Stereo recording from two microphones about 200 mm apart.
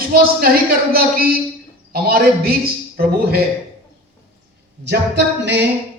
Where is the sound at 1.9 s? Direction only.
50° right (ahead or behind).